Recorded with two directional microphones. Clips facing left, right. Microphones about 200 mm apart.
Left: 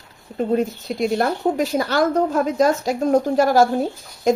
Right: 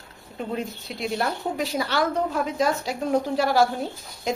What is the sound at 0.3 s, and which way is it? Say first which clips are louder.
A woman's voice: left 10 dB; 45° left (ahead or behind).